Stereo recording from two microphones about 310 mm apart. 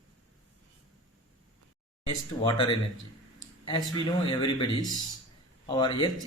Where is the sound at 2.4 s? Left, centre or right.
Centre.